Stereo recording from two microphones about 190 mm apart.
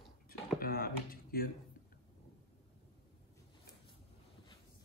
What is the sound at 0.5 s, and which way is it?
Speech, 50° left (ahead or behind).